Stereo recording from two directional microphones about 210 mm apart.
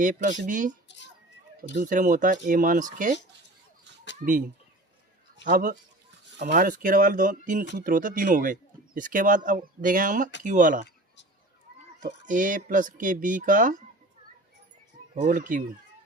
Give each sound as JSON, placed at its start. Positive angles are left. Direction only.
{"t": 0.0, "sound": "speech", "side_deg": -40}
{"t": 1.8, "sound": "speech", "side_deg": -40}
{"t": 4.2, "sound": "speech", "side_deg": -40}
{"t": 5.5, "sound": "speech", "side_deg": -40}
{"t": 12.2, "sound": "speech", "side_deg": -40}
{"t": 15.1, "sound": "speech", "side_deg": -35}